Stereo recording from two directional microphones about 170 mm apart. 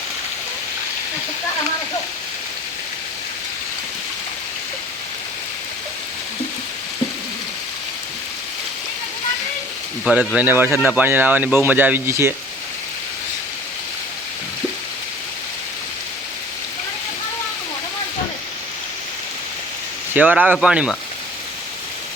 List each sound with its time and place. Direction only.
10.1 s speech: 5° right (ahead or behind)
20.1 s speech: 10° right (ahead or behind)